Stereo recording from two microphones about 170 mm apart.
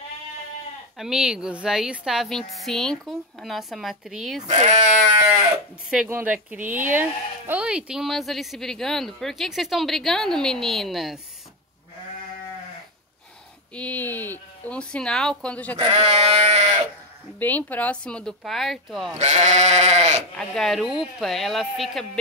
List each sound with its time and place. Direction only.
0.9 s speech: 5° right (ahead or behind)
4.5 s sheep: 45° right (ahead or behind)
6.0 s speech: 10° right (ahead or behind)
13.7 s speech: 10° left (ahead or behind)
15.8 s sheep: 40° right (ahead or behind)
17.4 s speech: 10° left (ahead or behind)
19.1 s sheep: 45° right (ahead or behind)
20.3 s speech: centre (ahead or behind)